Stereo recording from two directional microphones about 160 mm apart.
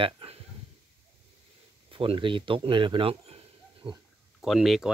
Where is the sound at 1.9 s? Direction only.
35° right (ahead or behind).